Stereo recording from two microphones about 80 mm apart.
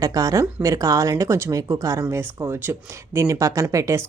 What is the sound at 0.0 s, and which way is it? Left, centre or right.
Speech, right.